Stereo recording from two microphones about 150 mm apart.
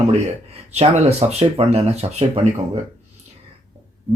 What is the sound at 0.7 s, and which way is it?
Speech, 45° right (ahead or behind).